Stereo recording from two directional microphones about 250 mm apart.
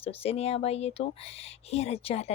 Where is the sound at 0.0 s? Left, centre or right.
Left.